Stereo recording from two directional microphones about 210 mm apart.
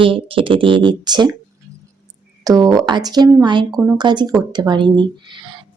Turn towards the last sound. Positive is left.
turn(degrees=-20)  # may be behind; listen again after turning